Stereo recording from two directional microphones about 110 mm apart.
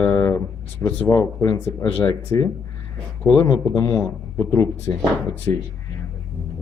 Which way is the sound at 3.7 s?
30° left (ahead or behind).